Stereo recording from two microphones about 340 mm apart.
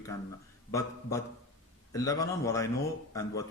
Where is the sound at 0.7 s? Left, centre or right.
Centre.